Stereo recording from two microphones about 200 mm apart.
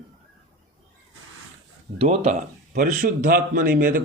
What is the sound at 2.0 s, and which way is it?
Speech, 35° right (ahead or behind).